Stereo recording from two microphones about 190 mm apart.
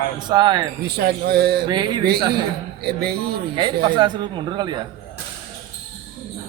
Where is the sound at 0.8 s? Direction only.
55° right (ahead or behind).